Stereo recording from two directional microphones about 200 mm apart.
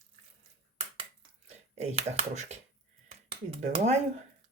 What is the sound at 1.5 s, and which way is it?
Speech, 35° right (ahead or behind).